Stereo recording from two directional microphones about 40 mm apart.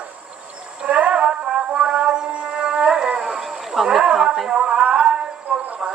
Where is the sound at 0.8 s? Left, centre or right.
Right.